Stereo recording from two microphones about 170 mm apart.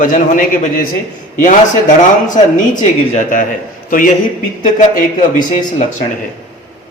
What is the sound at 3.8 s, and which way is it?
A man's voice, 55° left (ahead or behind).